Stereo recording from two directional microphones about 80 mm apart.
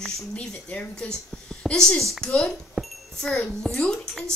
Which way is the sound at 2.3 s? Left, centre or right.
Centre.